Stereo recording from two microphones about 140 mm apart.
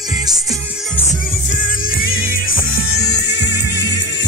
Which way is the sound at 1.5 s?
80° left.